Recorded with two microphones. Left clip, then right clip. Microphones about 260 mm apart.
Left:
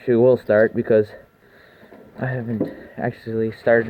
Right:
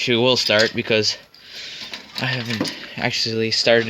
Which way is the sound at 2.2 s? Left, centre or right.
Right.